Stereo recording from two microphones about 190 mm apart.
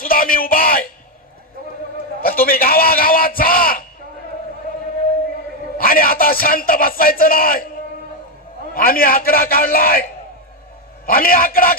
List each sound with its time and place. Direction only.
0.0 s a sound: 50° left (ahead or behind)
2.2 s a man's voice: 50° left (ahead or behind)
5.7 s speech: 50° left (ahead or behind)
8.7 s speech: 50° left (ahead or behind)